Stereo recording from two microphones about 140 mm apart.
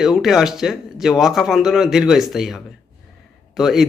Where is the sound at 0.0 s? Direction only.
Centre (ahead or behind).